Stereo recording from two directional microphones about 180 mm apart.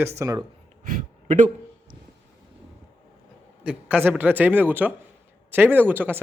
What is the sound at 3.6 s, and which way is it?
Speech, 5° right (ahead or behind).